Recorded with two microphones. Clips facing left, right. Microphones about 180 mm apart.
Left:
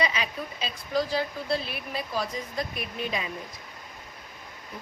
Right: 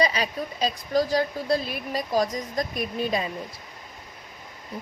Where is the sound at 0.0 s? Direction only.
40° right (ahead or behind).